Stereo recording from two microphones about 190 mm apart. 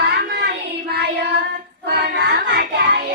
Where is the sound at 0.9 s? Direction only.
60° right (ahead or behind).